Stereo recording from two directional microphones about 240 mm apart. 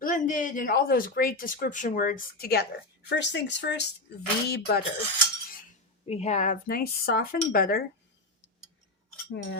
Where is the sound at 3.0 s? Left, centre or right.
Left.